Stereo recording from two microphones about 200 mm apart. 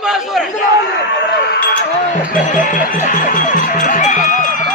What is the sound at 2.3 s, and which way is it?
Music, 40° left (ahead or behind).